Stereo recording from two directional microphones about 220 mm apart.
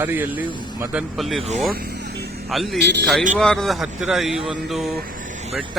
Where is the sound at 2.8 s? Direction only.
50° right (ahead or behind).